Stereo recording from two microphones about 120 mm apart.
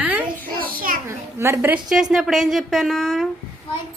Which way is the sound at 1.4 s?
20° right (ahead or behind).